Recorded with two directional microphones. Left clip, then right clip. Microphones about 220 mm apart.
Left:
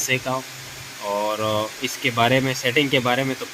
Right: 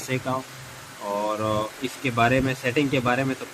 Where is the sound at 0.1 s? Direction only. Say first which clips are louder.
Left 5 dB; 25° left (ahead or behind).